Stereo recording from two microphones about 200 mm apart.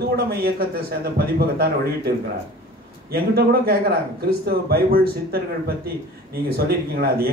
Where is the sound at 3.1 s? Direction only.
50° right (ahead or behind).